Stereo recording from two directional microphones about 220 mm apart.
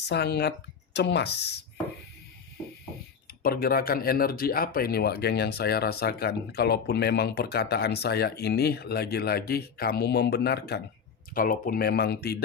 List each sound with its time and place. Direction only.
0.0 s speech: 50° left (ahead or behind)
3.4 s speech: 40° left (ahead or behind)